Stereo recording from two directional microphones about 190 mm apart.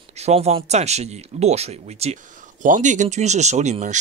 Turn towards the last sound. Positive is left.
turn(degrees=-40)  # may be behind; listen again after turning